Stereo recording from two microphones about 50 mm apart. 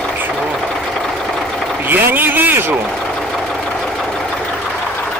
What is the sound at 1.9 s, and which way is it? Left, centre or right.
Speech, right.